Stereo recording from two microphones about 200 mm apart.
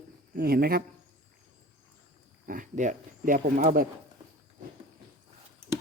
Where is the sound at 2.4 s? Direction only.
40° right (ahead or behind).